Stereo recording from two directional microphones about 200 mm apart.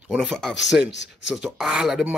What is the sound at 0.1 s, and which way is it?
Speech, 5° right (ahead or behind).